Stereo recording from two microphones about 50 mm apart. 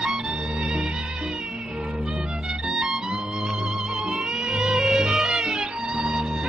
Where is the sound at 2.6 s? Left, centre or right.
Centre.